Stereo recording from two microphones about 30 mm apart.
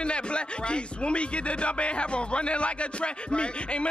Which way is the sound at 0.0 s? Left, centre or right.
Left.